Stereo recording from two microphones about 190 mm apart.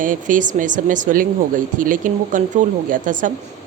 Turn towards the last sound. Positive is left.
turn(degrees=-45)  # may be behind; listen again after turning